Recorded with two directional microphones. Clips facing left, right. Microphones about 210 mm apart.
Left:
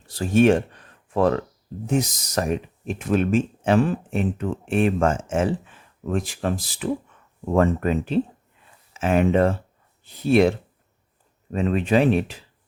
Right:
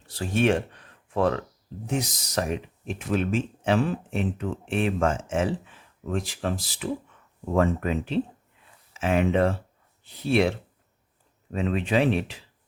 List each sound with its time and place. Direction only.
0.1 s speech: 45° left (ahead or behind)
11.5 s speech: 45° left (ahead or behind)